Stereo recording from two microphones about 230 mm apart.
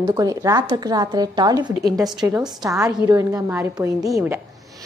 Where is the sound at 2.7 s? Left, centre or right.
Centre.